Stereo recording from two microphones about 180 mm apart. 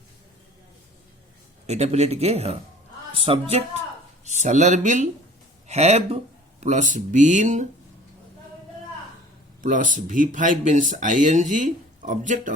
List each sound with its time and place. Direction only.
1.6 s speech: 35° right (ahead or behind)
4.3 s speech: 40° right (ahead or behind)
9.6 s speech: 45° right (ahead or behind)